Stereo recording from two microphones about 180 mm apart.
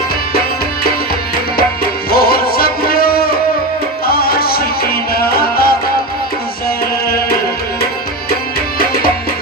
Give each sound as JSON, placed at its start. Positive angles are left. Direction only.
{"t": 2.0, "sound": "music", "side_deg": 55}